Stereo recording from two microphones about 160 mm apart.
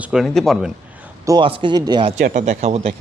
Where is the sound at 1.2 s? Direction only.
30° right (ahead or behind).